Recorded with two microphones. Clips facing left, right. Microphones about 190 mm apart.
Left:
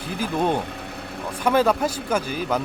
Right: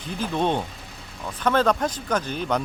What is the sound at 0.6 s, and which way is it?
Vehicle, 65° left (ahead or behind).